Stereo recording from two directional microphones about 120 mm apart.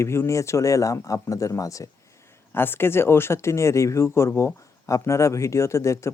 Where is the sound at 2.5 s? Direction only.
20° left (ahead or behind).